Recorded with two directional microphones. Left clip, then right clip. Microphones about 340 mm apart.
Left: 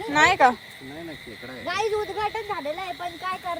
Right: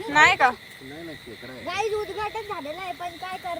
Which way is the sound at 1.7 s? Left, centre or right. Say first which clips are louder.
Left 1 dB; centre.